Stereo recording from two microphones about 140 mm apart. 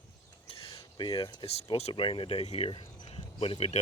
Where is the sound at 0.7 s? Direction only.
35° left (ahead or behind).